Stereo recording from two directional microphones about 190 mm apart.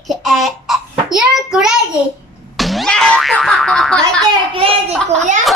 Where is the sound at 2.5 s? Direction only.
Centre (ahead or behind).